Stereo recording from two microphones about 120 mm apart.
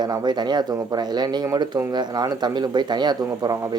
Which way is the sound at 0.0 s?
35° right (ahead or behind).